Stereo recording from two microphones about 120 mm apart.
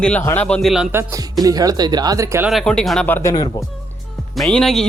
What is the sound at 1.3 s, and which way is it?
Speech, 30° right (ahead or behind).